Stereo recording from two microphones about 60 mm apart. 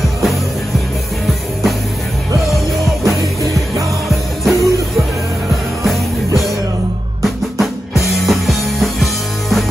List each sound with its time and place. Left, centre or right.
4.1 s music: centre
8.0 s music: centre